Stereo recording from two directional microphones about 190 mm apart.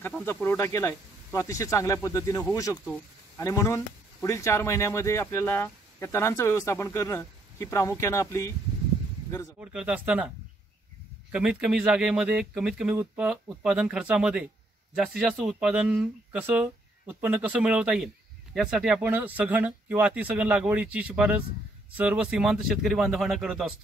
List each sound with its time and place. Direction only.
0.2 s speech: 10° left (ahead or behind)
9.6 s speech: 5° right (ahead or behind)
11.3 s speech: 5° right (ahead or behind)